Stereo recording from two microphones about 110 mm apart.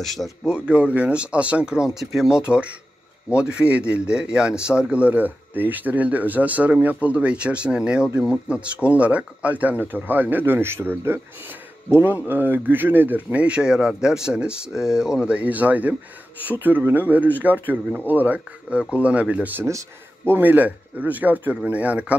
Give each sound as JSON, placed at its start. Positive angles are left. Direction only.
{"t": 0.0, "sound": "speech", "side_deg": 0}
{"t": 0.5, "sound": "speech", "side_deg": -10}